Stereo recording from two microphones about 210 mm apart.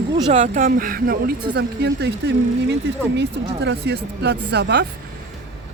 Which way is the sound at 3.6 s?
55° right (ahead or behind).